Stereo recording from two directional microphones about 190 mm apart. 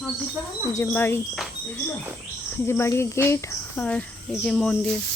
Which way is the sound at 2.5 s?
15° left (ahead or behind).